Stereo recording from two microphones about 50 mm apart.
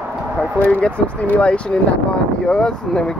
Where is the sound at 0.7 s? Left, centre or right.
Left.